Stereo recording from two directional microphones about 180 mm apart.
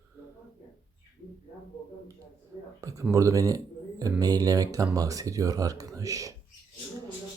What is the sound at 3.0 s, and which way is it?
Speech, 15° right (ahead or behind).